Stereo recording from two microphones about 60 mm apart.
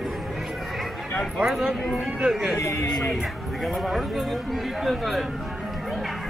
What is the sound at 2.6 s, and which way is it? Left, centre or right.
Speech, left.